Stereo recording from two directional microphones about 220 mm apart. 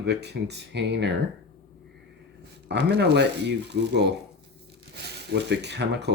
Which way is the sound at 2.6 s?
50° right (ahead or behind).